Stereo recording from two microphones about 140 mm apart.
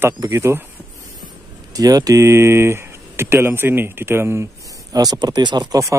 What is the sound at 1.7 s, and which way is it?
Speech, 25° right (ahead or behind).